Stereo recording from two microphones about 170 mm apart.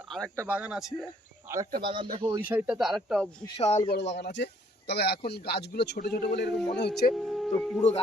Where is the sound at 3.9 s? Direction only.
90° left.